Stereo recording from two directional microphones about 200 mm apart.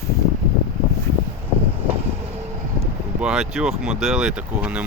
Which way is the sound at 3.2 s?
5° right (ahead or behind).